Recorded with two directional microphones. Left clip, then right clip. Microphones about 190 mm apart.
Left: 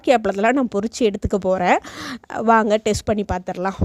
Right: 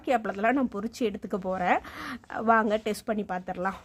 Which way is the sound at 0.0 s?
45° left (ahead or behind).